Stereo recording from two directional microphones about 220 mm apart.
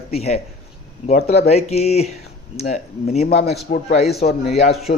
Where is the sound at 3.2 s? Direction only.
45° left (ahead or behind).